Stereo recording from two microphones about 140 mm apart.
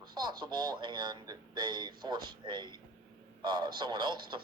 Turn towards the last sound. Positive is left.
turn(degrees=-35)  # may be behind; listen again after turning